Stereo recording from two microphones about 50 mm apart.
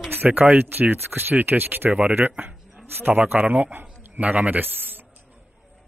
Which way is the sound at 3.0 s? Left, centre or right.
Right.